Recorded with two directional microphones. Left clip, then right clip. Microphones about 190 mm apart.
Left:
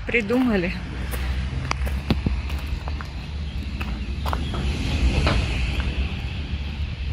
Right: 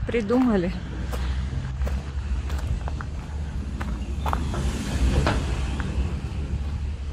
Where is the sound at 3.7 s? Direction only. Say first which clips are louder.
Left 2 dB; 15° left (ahead or behind).